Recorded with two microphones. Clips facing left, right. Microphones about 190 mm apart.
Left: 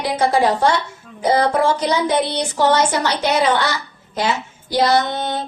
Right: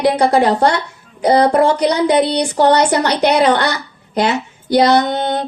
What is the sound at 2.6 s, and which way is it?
Female singing, 65° right (ahead or behind).